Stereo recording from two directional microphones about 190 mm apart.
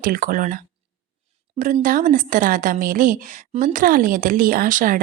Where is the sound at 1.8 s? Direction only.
45° right (ahead or behind).